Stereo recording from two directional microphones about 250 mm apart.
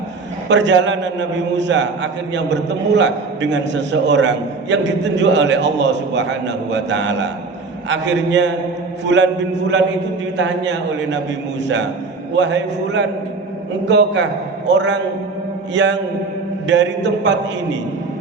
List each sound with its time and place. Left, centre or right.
0.4 s a man's voice: right
12.4 s a man's voice: right